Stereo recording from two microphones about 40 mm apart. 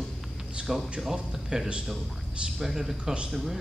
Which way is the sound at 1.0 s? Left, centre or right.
Centre.